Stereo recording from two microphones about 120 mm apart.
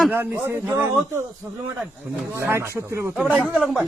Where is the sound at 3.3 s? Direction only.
5° right (ahead or behind).